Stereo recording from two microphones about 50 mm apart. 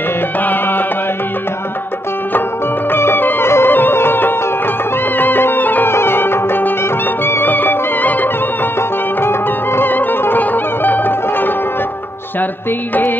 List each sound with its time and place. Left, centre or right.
0.4 s music: left
2.9 s music: left
3.4 s music: left
3.7 s music: left
5.9 s music: left
9.2 s music: left
9.8 s music: left